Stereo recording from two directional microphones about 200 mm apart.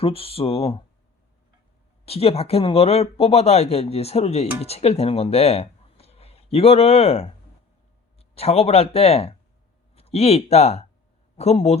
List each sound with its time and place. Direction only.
0.0 s speech: 30° left (ahead or behind)
2.0 s speech: 30° left (ahead or behind)